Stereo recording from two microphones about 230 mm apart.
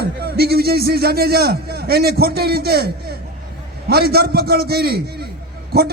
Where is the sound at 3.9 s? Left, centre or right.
Right.